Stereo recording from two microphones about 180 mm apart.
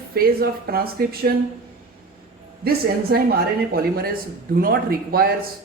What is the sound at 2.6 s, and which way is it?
Speech, 60° right (ahead or behind).